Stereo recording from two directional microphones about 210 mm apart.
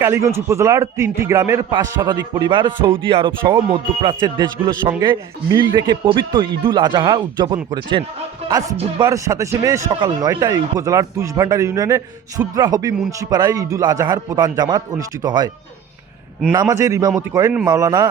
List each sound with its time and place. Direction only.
0.0 s a man's voice: 10° right (ahead or behind)
16.5 s a man's voice: 15° right (ahead or behind)